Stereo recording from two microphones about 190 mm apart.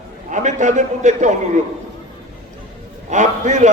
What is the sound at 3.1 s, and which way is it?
Speech, 40° right (ahead or behind).